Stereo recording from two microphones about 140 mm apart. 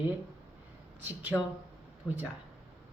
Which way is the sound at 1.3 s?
5° left (ahead or behind).